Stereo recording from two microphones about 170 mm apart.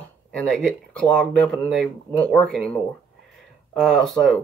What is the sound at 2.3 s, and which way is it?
Speech, 5° left (ahead or behind).